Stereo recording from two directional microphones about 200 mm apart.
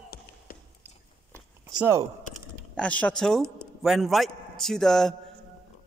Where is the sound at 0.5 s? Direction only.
45° left (ahead or behind).